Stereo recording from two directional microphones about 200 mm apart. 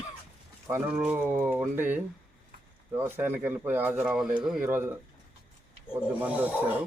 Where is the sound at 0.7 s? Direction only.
10° right (ahead or behind).